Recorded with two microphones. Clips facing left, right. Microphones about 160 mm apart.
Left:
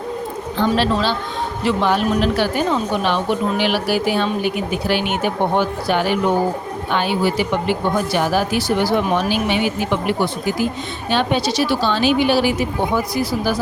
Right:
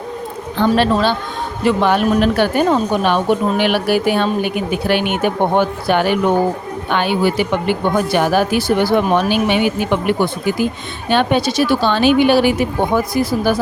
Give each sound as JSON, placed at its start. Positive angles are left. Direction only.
{"t": 0.6, "sound": "a woman's voice", "side_deg": -55}